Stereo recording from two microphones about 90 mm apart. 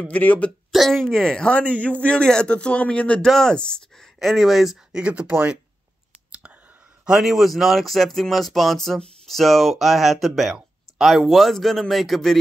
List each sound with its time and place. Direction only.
0.1 s speech: 15° left (ahead or behind)
0.7 s speech: 5° left (ahead or behind)
5.0 s speech: 15° right (ahead or behind)
7.1 s speech: 5° right (ahead or behind)